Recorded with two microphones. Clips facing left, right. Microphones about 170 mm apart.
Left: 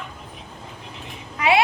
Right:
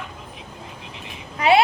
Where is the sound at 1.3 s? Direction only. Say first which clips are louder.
Right 3 dB; 30° right (ahead or behind).